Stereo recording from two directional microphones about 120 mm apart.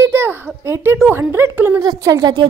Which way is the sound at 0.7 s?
20° right (ahead or behind).